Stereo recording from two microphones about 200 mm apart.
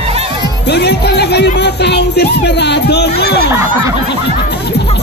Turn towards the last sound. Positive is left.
turn(degrees=-10)  # may be behind; listen again after turning